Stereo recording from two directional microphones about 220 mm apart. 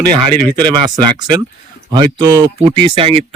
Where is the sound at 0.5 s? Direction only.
20° right (ahead or behind).